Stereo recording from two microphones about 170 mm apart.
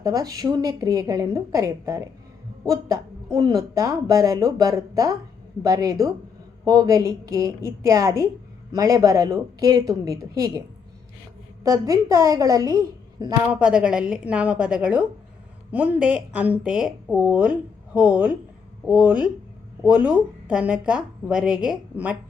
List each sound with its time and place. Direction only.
0.0 s a woman's voice: 20° right (ahead or behind)
11.6 s a woman's voice: 20° right (ahead or behind)
13.5 s a woman's voice: 5° right (ahead or behind)